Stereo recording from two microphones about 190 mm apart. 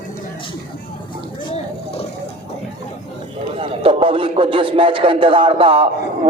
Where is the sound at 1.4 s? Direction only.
30° left (ahead or behind).